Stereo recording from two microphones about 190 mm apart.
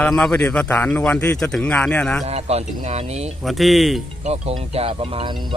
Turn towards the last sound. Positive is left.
turn(degrees=-25)  # may be behind; listen again after turning